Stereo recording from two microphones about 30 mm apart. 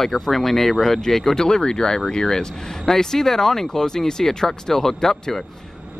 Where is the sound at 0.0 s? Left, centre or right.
Centre.